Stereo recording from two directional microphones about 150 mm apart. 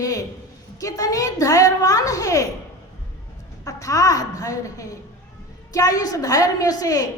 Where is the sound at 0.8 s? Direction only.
25° left (ahead or behind).